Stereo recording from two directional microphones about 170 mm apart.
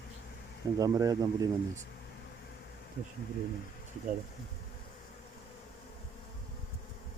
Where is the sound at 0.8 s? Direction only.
20° right (ahead or behind).